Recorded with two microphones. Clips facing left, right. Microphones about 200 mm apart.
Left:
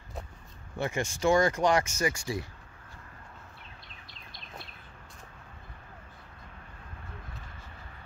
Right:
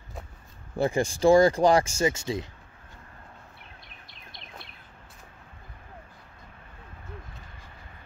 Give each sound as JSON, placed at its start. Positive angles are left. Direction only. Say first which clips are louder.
{"t": 0.7, "sound": "speech", "louder": "right 7 dB", "side_deg": -35}